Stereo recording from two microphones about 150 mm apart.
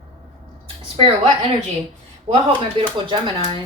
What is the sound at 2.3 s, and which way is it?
Speech, 50° right (ahead or behind).